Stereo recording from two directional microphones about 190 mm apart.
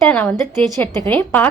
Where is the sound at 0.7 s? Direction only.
15° left (ahead or behind).